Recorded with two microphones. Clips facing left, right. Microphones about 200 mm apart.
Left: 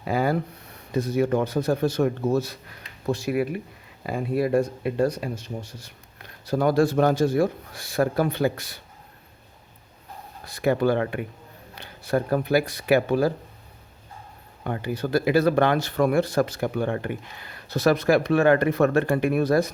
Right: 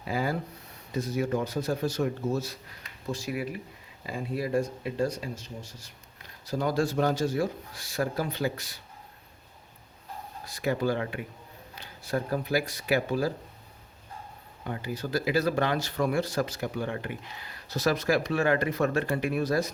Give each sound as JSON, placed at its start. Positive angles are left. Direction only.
{"t": 0.0, "sound": "speech", "side_deg": 60}
{"t": 10.4, "sound": "speech", "side_deg": 60}
{"t": 14.6, "sound": "speech", "side_deg": 60}